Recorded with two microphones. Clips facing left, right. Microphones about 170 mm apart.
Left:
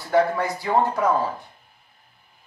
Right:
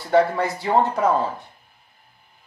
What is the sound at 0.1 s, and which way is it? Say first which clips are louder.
Speech: right 2 dB; 25° right (ahead or behind).